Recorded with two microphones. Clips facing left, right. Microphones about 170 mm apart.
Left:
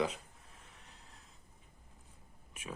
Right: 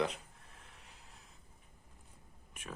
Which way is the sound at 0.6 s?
Centre (ahead or behind).